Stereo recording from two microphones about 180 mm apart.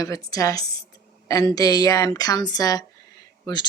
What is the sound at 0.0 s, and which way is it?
Speech, 20° left (ahead or behind).